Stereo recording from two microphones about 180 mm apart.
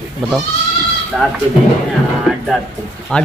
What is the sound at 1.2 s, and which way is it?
Speech, centre (ahead or behind).